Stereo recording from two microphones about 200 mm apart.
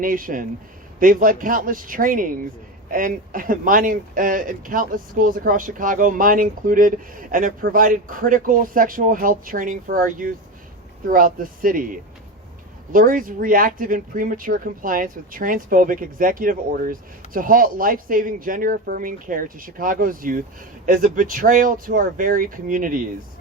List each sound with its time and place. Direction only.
0.0 s speech: 45° right (ahead or behind)